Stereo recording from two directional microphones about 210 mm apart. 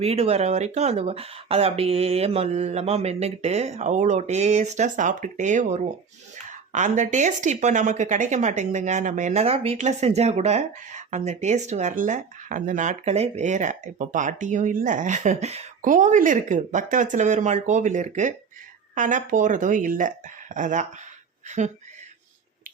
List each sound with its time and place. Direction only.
0.0 s speech: 30° right (ahead or behind)